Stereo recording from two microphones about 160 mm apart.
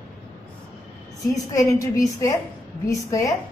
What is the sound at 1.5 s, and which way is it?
A woman's voice, 20° left (ahead or behind).